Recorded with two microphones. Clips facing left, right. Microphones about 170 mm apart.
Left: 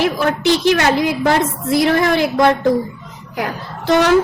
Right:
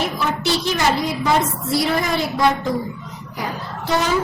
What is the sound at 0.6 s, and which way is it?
A woman's voice, 70° left (ahead or behind).